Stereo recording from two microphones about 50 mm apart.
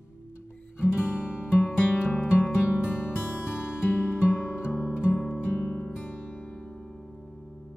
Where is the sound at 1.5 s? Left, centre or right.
Left.